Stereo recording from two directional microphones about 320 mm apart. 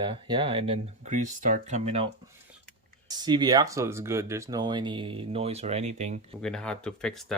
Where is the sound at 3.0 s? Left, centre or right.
Centre.